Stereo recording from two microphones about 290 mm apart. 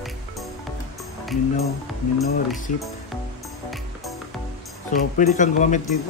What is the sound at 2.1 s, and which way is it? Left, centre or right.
Speech, centre.